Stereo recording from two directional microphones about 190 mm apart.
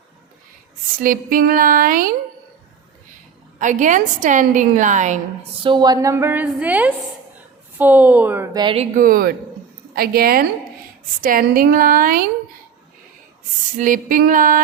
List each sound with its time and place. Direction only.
0.9 s speech: 45° right (ahead or behind)
3.6 s a woman's voice: 40° right (ahead or behind)
5.6 s a woman's voice: 25° right (ahead or behind)
8.5 s speech: 30° right (ahead or behind)
9.0 s speech: 50° right (ahead or behind)
13.7 s speech: 45° right (ahead or behind)